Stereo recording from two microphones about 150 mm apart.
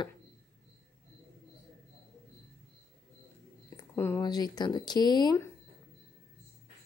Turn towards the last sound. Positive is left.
turn(degrees=30)  # may be behind; listen again after turning